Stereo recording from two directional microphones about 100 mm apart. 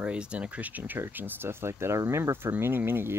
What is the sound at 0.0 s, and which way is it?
Speech, 10° right (ahead or behind).